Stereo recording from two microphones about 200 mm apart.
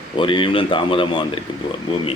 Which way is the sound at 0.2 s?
25° left (ahead or behind).